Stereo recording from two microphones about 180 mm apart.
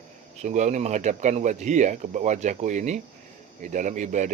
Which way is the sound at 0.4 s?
40° right (ahead or behind).